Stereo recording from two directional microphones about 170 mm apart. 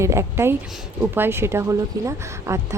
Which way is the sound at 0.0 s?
15° right (ahead or behind).